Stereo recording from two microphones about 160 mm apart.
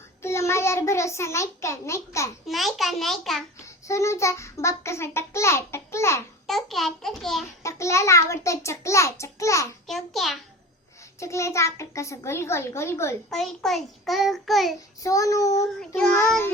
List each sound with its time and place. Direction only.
0.2 s a child's voice: 15° left (ahead or behind)
2.5 s a child's voice: centre (ahead or behind)
3.8 s a child's voice: 20° left (ahead or behind)
6.5 s a child's voice: centre (ahead or behind)
7.6 s a child's voice: 20° left (ahead or behind)
9.8 s a child's voice: centre (ahead or behind)
11.2 s a child's voice: 20° left (ahead or behind)
13.3 s a child's voice: centre (ahead or behind)
15.0 s child singing: 20° left (ahead or behind)